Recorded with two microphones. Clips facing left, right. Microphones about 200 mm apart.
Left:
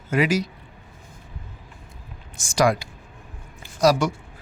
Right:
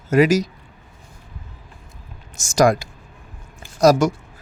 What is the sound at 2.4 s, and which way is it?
Speech, 45° right (ahead or behind).